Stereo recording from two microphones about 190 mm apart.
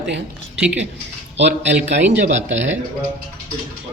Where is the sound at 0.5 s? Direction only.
5° right (ahead or behind).